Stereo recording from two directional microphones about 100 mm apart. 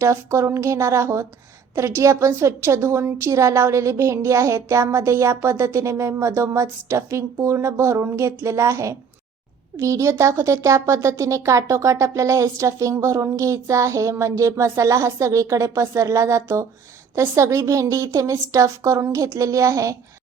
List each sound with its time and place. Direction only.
0.0 s a woman's voice: 30° right (ahead or behind)